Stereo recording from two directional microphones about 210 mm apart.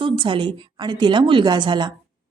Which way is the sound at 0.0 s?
25° right (ahead or behind).